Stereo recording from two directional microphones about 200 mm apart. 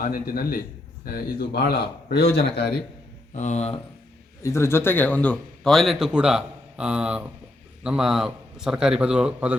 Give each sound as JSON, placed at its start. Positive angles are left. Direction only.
{"t": 0.0, "sound": "speech", "side_deg": 45}
{"t": 3.3, "sound": "speech", "side_deg": 35}
{"t": 4.4, "sound": "a man's voice", "side_deg": 15}